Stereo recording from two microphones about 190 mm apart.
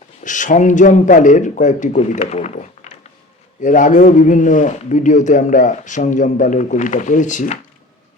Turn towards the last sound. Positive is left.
turn(degrees=40)  # may be behind; listen again after turning